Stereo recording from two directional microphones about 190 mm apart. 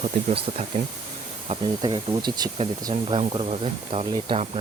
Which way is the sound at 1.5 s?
25° right (ahead or behind).